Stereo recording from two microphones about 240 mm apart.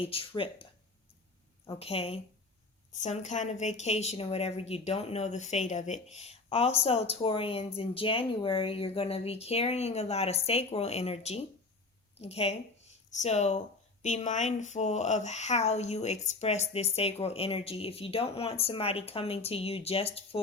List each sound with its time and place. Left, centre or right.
0.0 s a woman's voice: left